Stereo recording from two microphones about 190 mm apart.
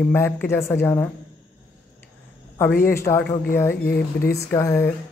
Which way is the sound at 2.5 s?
10° left (ahead or behind).